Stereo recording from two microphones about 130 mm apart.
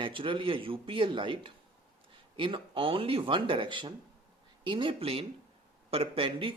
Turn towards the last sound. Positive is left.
turn(degrees=-40)  # may be behind; listen again after turning